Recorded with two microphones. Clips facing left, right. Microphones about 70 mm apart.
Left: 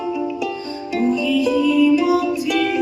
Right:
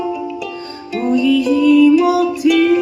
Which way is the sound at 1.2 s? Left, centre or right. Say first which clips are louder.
Right 4 dB; right.